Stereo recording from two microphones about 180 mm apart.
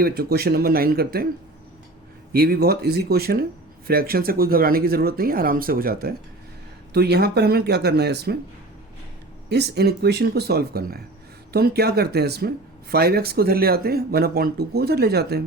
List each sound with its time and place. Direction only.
0.0 s speech: 60° right (ahead or behind)
2.3 s speech: 60° right (ahead or behind)
9.5 s speech: 65° right (ahead or behind)